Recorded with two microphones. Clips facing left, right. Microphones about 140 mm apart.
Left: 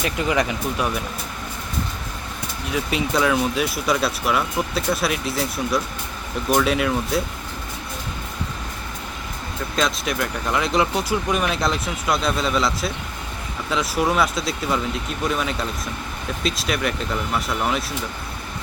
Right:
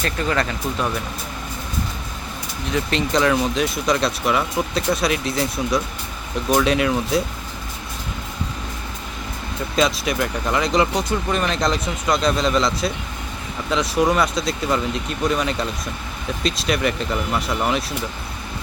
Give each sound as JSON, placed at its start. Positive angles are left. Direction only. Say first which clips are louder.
{"t": 0.0, "sound": "speech", "louder": "left 1 dB", "side_deg": 15}
{"t": 2.6, "sound": "speech", "louder": "right 2 dB", "side_deg": 5}
{"t": 9.7, "sound": "speech", "louder": "right 3 dB", "side_deg": 0}